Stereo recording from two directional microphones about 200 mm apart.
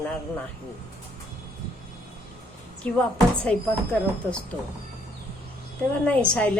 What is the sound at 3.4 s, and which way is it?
Speech, 5° left (ahead or behind).